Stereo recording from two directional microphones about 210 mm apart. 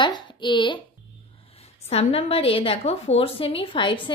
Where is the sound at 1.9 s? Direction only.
25° left (ahead or behind).